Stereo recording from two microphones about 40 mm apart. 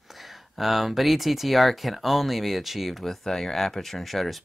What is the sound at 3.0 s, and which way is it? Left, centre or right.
Speech, centre.